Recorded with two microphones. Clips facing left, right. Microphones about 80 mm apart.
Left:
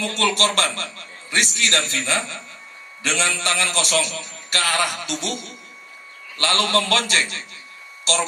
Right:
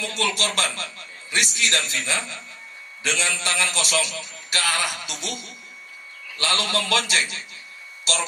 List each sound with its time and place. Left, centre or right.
0.0 s a man's voice: left
1.3 s a man's voice: left
6.3 s a man's voice: left
8.0 s a sound: left